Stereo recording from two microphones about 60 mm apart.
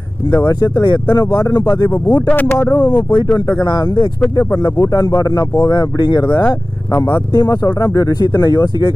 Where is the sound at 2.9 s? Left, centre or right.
Left.